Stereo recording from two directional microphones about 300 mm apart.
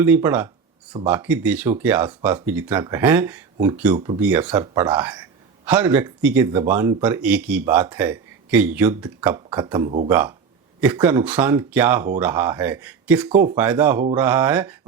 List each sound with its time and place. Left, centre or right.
0.0 s a man's voice: centre
3.9 s speech: centre
4.2 s a man's voice: centre